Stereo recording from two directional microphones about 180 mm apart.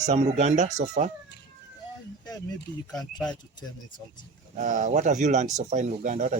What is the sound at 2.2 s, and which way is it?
Speech, 20° left (ahead or behind).